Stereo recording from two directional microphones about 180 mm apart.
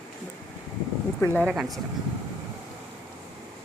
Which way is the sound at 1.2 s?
10° left (ahead or behind).